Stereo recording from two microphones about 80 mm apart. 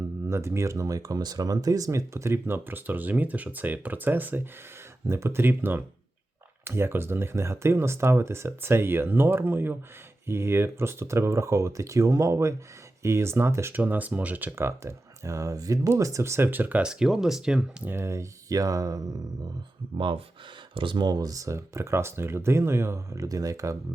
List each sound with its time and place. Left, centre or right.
0.3 s speech: right
5.0 s speech: right
13.7 s speech: right
14.6 s speech: right
16.5 s speech: right
16.8 s speech: centre
17.8 s speech: right
20.7 s speech: right